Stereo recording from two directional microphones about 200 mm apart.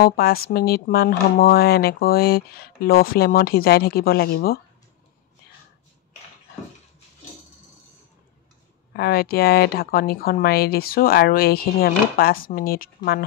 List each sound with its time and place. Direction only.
0.0 s speech: 50° left (ahead or behind)
8.9 s speech: 50° left (ahead or behind)